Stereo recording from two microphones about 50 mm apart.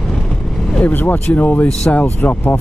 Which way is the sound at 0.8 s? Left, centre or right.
Left.